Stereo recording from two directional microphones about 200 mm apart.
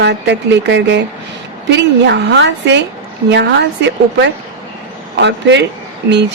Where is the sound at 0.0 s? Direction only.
60° right (ahead or behind).